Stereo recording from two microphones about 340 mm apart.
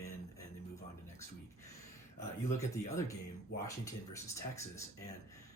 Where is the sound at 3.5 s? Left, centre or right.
Left.